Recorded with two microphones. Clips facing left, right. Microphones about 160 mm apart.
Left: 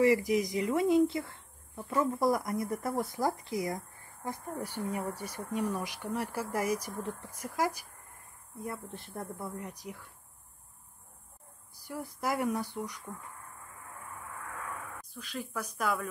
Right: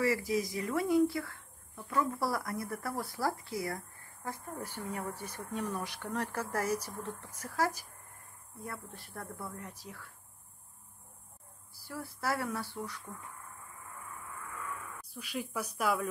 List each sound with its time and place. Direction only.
0.0 s speech: 20° left (ahead or behind)
11.7 s speech: 15° left (ahead or behind)
15.1 s speech: 10° right (ahead or behind)